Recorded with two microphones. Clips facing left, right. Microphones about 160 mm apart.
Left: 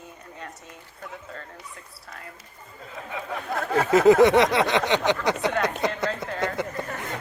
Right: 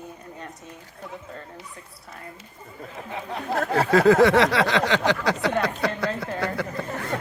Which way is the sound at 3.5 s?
30° right (ahead or behind).